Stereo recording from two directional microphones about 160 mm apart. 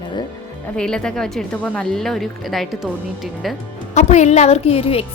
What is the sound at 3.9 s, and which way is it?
A woman's voice, 45° left (ahead or behind).